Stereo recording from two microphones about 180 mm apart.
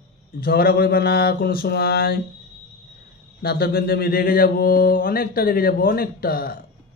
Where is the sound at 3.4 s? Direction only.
60° left (ahead or behind).